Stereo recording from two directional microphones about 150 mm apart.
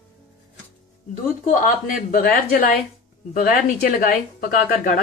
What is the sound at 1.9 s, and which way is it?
A woman's voice, 75° left (ahead or behind).